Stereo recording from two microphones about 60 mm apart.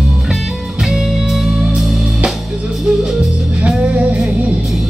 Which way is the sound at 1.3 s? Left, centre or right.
Centre.